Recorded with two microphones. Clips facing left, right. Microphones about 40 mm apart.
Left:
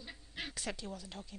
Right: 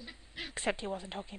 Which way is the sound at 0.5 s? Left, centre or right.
Right.